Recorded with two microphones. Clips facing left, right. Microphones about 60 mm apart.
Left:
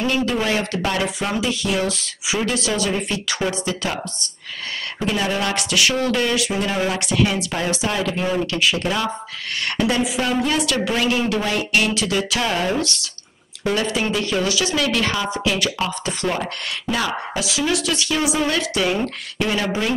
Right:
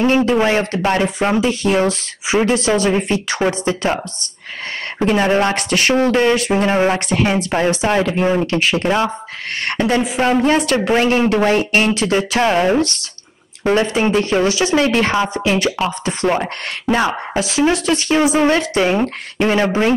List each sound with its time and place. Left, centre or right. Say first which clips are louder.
0.0 s speech: right 7 dB; right